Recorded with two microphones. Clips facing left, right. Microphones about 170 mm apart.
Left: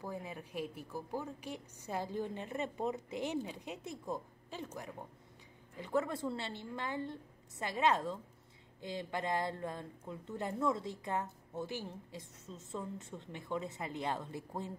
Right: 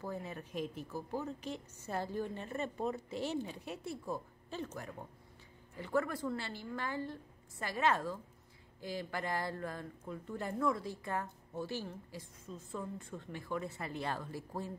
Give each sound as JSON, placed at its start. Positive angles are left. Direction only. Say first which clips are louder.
{"t": 0.0, "sound": "a woman's voice", "louder": "right 1 dB", "side_deg": 15}